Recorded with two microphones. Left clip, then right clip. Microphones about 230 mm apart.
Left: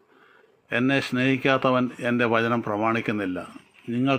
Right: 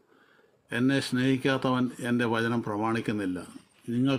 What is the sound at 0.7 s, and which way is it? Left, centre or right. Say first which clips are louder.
A man's voice: left 4 dB; centre.